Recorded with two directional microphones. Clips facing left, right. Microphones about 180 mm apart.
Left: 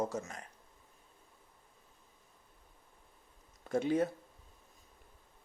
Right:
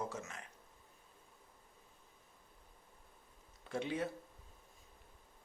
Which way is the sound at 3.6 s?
45° left (ahead or behind).